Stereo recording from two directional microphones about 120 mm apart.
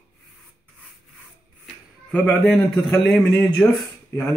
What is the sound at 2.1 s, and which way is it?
Speech, 10° left (ahead or behind).